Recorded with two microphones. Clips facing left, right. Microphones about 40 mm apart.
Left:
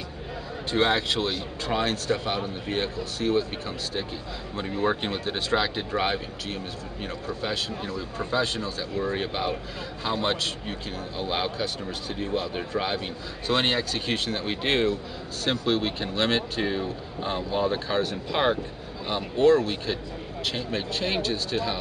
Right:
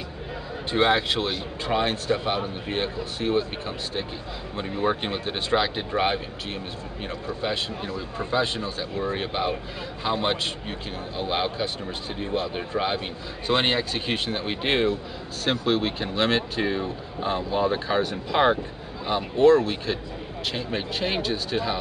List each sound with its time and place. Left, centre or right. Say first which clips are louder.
0.7 s speech: right 2 dB; centre
4.6 s speech: right 1 dB; centre